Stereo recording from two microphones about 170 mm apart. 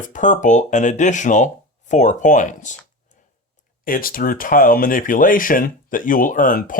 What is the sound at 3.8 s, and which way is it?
Speech, 55° left (ahead or behind).